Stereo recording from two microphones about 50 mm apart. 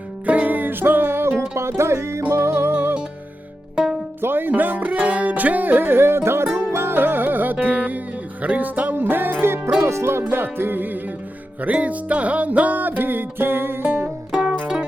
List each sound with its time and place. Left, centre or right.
0.3 s music: right
4.2 s music: right
9.8 s music: right
10.3 s music: right
11.6 s music: right